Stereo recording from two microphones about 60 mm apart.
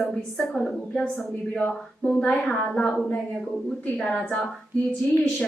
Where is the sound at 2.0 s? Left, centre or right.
Centre.